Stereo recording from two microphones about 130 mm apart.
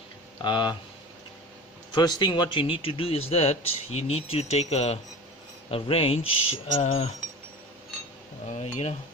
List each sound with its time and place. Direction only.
0.4 s speech: 35° left (ahead or behind)
2.0 s speech: 30° left (ahead or behind); by 7.1 s 55° left (ahead or behind)
8.4 s cutlery: 60° left (ahead or behind)